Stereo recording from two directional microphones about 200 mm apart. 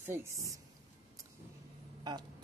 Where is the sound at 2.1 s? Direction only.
20° right (ahead or behind).